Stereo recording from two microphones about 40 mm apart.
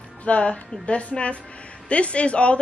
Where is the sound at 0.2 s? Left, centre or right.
Left.